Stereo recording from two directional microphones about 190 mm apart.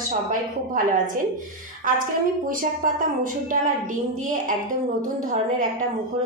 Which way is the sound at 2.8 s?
45° right (ahead or behind).